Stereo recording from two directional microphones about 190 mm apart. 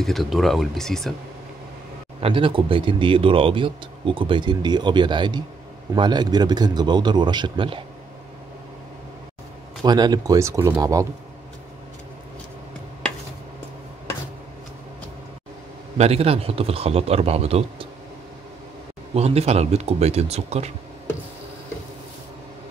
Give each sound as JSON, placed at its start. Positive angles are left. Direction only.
{"t": 0.0, "sound": "speech", "side_deg": 0}
{"t": 2.1, "sound": "speech", "side_deg": -30}
{"t": 9.8, "sound": "speech", "side_deg": -20}
{"t": 16.0, "sound": "speech", "side_deg": -30}
{"t": 19.1, "sound": "speech", "side_deg": -35}